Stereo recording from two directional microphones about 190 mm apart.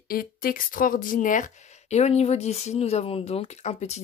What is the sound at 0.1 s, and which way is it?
Speech, 50° left (ahead or behind).